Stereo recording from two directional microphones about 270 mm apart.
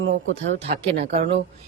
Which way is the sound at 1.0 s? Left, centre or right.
Right.